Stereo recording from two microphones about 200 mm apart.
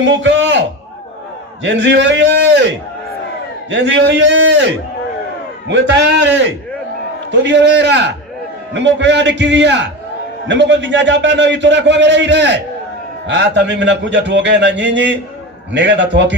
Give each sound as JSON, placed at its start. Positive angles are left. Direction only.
{"t": 0.0, "sound": "a sound", "side_deg": -65}
{"t": 1.6, "sound": "a man's voice", "side_deg": -65}
{"t": 3.7, "sound": "a man's voice", "side_deg": -65}